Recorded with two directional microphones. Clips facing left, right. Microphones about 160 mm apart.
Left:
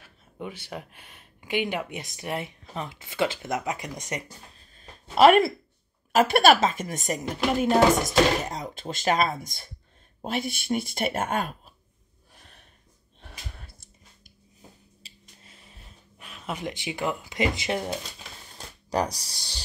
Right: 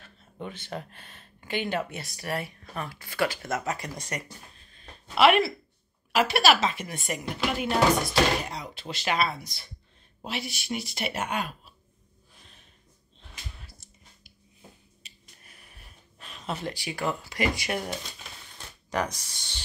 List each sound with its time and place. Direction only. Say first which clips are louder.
0.0 s speech: left 1 dB; 10° left (ahead or behind)
4.7 s a sound: left 4 dB; 40° left (ahead or behind)
6.1 s speech: left 4 dB; 50° left (ahead or behind)
13.2 s a sound: left 2 dB; 55° left (ahead or behind)
15.0 s finger snapping: left 1 dB; 20° left (ahead or behind)
16.3 s speech: even; 10° left (ahead or behind)
18.9 s speech: left 3 dB; 35° left (ahead or behind)